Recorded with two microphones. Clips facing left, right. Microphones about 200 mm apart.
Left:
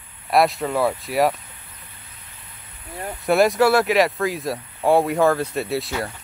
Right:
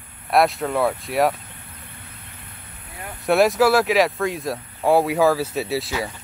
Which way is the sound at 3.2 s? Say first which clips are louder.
Even; centre (ahead or behind).